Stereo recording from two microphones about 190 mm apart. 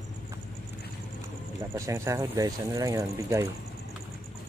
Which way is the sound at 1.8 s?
15° right (ahead or behind).